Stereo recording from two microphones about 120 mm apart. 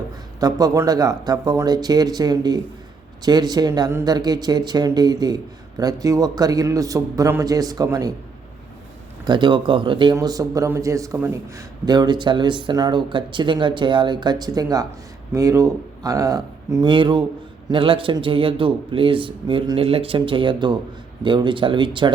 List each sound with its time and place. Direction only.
0.3 s a man's voice: 30° right (ahead or behind)
9.2 s speech: 40° right (ahead or behind)
10.2 s a man's voice: 30° right (ahead or behind)
11.9 s a man's voice: 40° right (ahead or behind)
16.9 s a man's voice: 40° right (ahead or behind)